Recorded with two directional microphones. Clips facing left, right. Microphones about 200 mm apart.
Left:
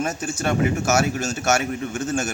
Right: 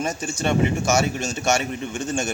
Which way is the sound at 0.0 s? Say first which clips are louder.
Even; 5° left (ahead or behind).